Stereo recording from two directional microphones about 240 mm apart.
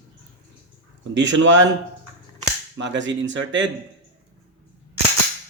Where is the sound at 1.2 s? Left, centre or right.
Right.